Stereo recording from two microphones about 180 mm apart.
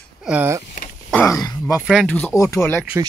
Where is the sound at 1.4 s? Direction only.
20° left (ahead or behind).